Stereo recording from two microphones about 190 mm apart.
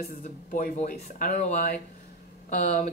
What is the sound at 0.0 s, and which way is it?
Speech, 45° left (ahead or behind).